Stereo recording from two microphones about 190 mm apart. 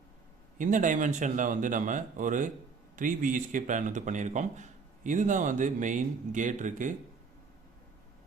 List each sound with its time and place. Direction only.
0.6 s speech: 40° right (ahead or behind)